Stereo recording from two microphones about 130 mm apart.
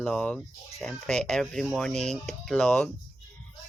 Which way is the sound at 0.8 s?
5° left (ahead or behind).